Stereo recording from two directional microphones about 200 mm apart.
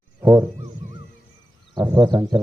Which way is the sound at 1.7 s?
20° right (ahead or behind).